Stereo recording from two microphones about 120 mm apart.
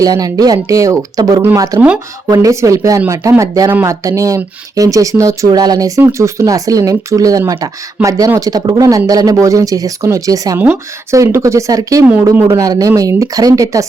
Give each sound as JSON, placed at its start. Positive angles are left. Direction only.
{"t": 0.0, "sound": "speech", "side_deg": -30}
{"t": 1.8, "sound": "speech", "side_deg": -10}
{"t": 2.3, "sound": "speech", "side_deg": -25}
{"t": 8.0, "sound": "speech", "side_deg": -10}
{"t": 8.4, "sound": "speech", "side_deg": -30}